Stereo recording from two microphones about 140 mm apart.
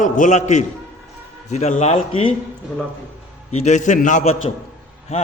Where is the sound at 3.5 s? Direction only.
55° left (ahead or behind).